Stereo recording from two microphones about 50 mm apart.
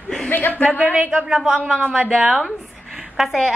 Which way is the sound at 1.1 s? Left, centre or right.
Centre.